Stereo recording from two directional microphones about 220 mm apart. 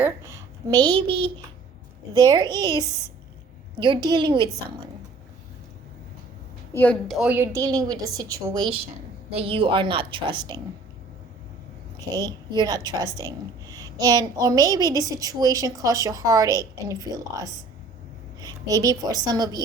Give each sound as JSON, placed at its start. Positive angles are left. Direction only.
{"t": 0.0, "sound": "a woman's voice", "side_deg": -10}
{"t": 6.7, "sound": "a woman's voice", "side_deg": 5}
{"t": 12.1, "sound": "a woman's voice", "side_deg": -15}